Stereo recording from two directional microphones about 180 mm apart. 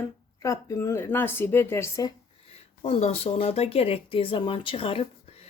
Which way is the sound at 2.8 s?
35° left (ahead or behind).